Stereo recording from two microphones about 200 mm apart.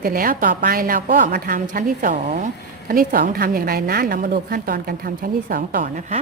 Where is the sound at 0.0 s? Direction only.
45° right (ahead or behind).